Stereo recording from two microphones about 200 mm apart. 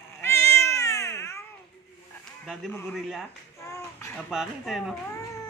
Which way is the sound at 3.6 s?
15° left (ahead or behind).